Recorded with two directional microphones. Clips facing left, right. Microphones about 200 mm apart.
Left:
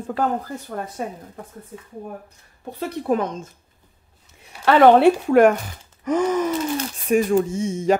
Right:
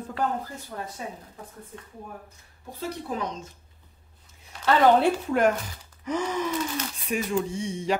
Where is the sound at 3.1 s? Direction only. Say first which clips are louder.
Left 13 dB; 50° left (ahead or behind).